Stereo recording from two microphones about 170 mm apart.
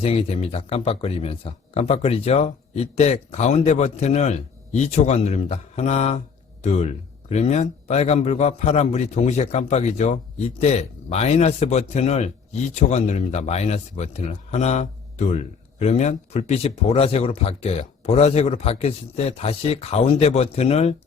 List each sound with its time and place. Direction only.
0.0 s speech: 35° left (ahead or behind)